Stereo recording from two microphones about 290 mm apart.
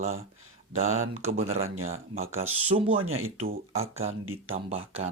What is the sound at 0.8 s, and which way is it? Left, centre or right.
Speech, right.